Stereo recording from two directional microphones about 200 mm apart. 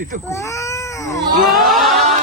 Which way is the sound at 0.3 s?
15° left (ahead or behind).